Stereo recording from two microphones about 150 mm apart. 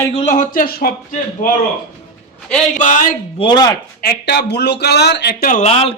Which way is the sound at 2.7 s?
60° left (ahead or behind).